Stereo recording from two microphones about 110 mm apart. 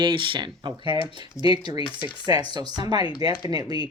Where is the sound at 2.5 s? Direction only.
40° right (ahead or behind).